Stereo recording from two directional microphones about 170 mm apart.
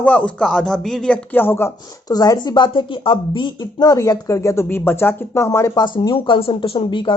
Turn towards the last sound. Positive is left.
turn(degrees=30)  # may be behind; listen again after turning